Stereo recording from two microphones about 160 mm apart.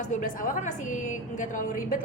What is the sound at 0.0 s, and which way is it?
A woman's voice, 55° left (ahead or behind).